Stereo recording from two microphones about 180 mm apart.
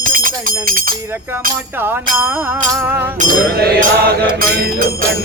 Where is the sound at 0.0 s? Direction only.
50° right (ahead or behind).